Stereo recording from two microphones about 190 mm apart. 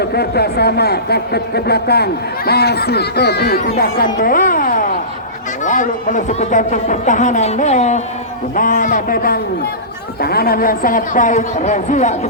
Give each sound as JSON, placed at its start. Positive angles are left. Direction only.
{"t": 0.0, "sound": "a man's voice", "side_deg": 55}